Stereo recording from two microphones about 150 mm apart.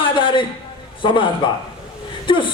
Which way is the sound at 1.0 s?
35° left (ahead or behind).